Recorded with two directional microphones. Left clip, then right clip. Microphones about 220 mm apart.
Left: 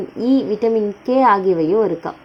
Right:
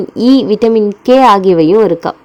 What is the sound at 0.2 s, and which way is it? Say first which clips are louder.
A woman's voice: right 8 dB; 35° right (ahead or behind).